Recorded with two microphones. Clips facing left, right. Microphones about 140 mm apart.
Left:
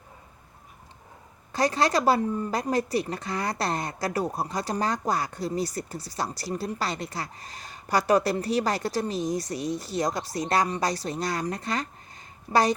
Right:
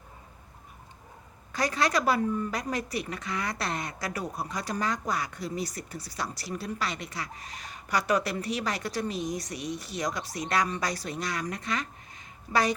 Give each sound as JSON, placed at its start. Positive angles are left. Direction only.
{"t": 1.5, "sound": "speech", "side_deg": 30}